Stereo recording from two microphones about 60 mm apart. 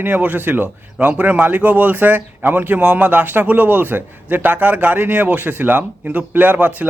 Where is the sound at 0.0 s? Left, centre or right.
Right.